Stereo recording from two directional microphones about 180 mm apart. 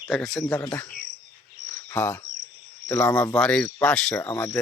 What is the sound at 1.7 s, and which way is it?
Cricket, 10° left (ahead or behind).